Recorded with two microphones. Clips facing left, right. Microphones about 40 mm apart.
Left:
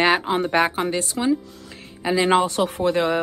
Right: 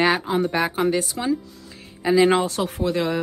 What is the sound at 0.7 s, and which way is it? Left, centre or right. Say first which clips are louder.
Speech: right 2 dB; centre.